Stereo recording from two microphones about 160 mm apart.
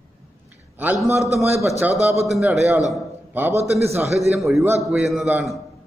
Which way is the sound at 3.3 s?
10° right (ahead or behind).